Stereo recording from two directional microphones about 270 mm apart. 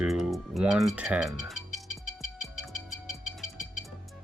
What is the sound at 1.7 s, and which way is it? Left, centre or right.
Music, left.